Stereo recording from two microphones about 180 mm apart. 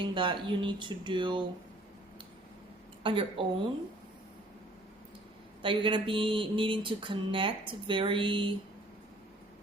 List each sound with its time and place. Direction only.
0.0 s speech: 30° right (ahead or behind)
3.0 s a woman's voice: 30° right (ahead or behind)
5.6 s speech: 30° right (ahead or behind)